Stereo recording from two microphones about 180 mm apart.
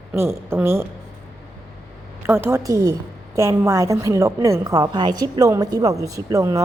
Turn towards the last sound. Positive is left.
turn(degrees=-15)  # may be behind; listen again after turning